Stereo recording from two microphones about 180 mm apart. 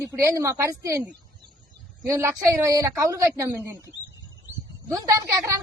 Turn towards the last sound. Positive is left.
turn(degrees=-15)  # may be behind; listen again after turning